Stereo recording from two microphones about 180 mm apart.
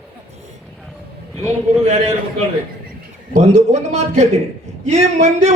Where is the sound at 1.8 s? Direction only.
40° right (ahead or behind).